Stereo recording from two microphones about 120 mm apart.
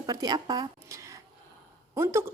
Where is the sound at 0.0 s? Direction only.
35° right (ahead or behind).